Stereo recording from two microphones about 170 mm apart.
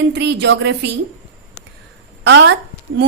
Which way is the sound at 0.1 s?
90° right.